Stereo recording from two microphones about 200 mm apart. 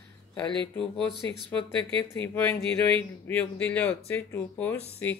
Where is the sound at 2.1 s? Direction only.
10° left (ahead or behind).